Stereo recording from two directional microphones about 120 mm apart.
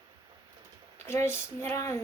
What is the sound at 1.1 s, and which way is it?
Speech, 20° left (ahead or behind).